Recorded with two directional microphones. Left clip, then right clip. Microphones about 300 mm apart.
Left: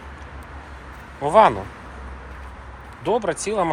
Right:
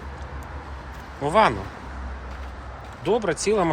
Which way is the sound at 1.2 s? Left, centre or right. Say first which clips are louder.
Left 4 dB; centre.